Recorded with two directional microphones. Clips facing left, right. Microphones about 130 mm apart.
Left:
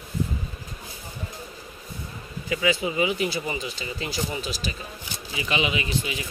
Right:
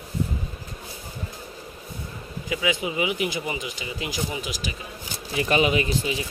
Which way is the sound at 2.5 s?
15° right (ahead or behind).